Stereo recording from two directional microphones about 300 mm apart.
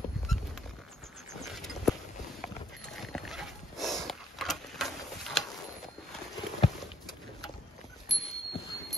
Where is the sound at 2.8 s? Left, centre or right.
Centre.